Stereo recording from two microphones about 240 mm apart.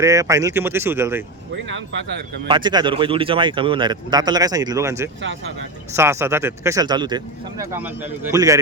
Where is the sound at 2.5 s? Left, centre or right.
Centre.